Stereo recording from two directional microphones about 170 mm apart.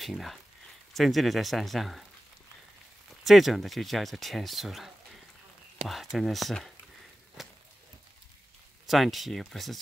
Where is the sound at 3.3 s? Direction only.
Centre (ahead or behind).